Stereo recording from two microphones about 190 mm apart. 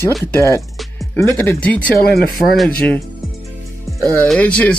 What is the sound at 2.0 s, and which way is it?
Speech, 55° left (ahead or behind).